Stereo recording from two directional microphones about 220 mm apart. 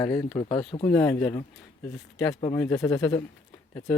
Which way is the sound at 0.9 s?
10° left (ahead or behind).